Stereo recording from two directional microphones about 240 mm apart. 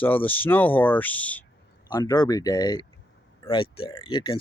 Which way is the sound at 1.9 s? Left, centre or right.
Centre.